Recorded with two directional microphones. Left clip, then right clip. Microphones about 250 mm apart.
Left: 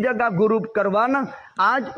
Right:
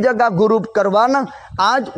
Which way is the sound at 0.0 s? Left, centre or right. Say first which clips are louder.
Right 6 dB; right.